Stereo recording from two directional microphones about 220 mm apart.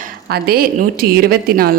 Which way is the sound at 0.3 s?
45° right (ahead or behind).